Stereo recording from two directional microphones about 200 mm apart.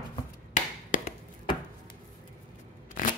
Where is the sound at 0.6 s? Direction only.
40° left (ahead or behind).